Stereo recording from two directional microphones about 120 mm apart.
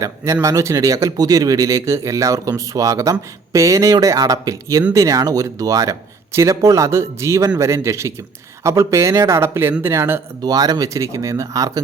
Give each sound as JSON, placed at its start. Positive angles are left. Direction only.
{"t": 0.4, "sound": "speech", "side_deg": -25}